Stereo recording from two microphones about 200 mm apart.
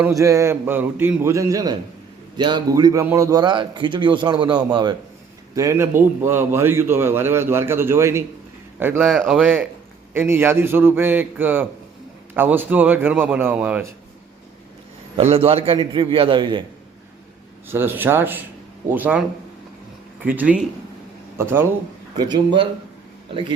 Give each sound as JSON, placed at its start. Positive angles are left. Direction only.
{"t": 0.0, "sound": "a man's voice", "side_deg": -15}
{"t": 15.1, "sound": "a man's voice", "side_deg": -30}
{"t": 17.7, "sound": "a man's voice", "side_deg": -10}
{"t": 20.2, "sound": "a man's voice", "side_deg": -10}
{"t": 22.2, "sound": "a man's voice", "side_deg": -20}